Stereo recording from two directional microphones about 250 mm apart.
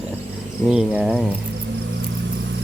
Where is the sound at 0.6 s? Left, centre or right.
Centre.